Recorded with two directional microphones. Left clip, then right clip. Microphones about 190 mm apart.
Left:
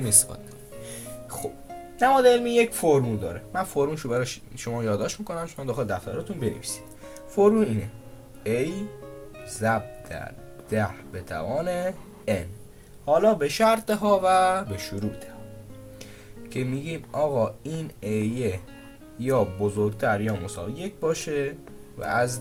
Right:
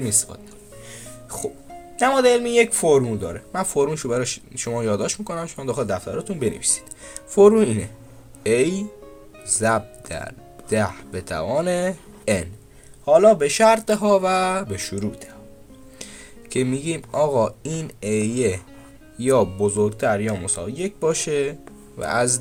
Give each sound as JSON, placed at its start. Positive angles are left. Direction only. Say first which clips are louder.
{"t": 0.0, "sound": "speech", "louder": "right 2 dB", "side_deg": -25}
{"t": 0.9, "sound": "music", "louder": "right 1 dB", "side_deg": -35}
{"t": 2.0, "sound": "speech", "louder": "right 1 dB", "side_deg": -45}
{"t": 16.5, "sound": "speech", "louder": "right 8 dB", "side_deg": -50}